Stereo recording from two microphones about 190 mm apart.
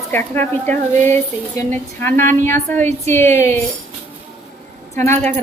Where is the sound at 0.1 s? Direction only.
10° left (ahead or behind).